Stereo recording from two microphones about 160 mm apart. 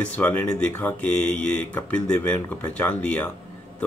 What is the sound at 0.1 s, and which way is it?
Speech, 10° left (ahead or behind).